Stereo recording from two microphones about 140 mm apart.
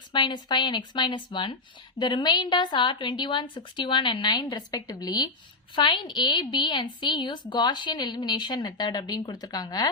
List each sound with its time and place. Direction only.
0.1 s a woman's voice: 35° left (ahead or behind)